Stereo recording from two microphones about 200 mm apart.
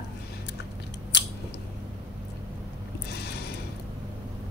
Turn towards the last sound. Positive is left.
turn(degrees=55)  # may be behind; listen again after turning